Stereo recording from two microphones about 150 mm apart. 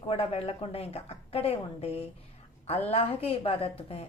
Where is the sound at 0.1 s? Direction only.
40° left (ahead or behind).